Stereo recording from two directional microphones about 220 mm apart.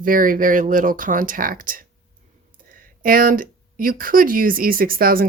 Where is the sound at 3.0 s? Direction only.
40° right (ahead or behind).